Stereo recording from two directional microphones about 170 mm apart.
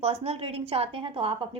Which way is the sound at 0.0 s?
35° right (ahead or behind).